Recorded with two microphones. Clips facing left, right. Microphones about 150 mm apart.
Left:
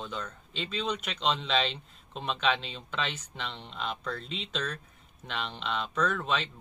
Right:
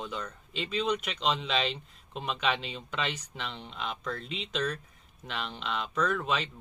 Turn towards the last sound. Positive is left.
turn(degrees=-5)  # may be behind; listen again after turning